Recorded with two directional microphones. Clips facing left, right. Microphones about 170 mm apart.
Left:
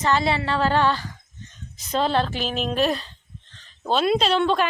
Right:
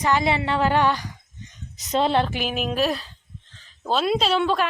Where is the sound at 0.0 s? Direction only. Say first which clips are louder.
Even; 15° right (ahead or behind).